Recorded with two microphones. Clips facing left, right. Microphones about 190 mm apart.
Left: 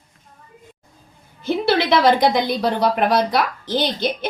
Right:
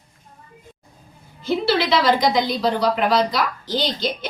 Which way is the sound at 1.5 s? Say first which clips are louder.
Left 2 dB; 55° left (ahead or behind).